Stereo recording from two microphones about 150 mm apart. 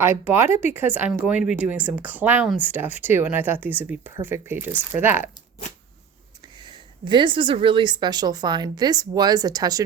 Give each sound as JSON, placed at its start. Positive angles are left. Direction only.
{"t": 0.0, "sound": "speech", "side_deg": -15}
{"t": 6.7, "sound": "a woman's voice", "side_deg": -30}